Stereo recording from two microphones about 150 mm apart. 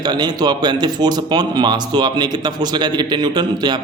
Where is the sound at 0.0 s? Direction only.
30° right (ahead or behind).